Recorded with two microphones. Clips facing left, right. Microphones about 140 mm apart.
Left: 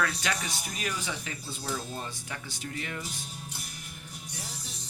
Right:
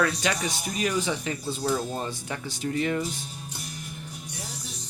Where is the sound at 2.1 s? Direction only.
30° right (ahead or behind).